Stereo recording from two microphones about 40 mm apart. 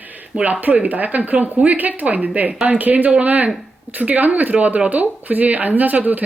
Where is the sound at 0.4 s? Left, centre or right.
Right.